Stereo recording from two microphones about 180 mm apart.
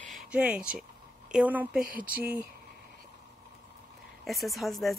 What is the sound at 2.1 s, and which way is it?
Speech, 60° right (ahead or behind).